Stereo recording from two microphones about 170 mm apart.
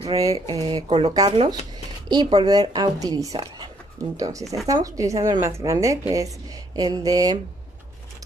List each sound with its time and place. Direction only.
0.1 s a woman's voice: 20° right (ahead or behind)
0.8 s speech: 40° right (ahead or behind)
1.1 s a woman's voice: 25° right (ahead or behind)